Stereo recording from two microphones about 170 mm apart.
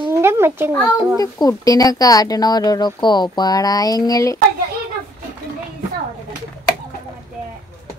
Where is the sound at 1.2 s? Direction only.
20° left (ahead or behind).